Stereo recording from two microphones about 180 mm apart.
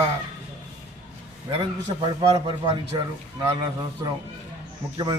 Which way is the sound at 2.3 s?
25° right (ahead or behind).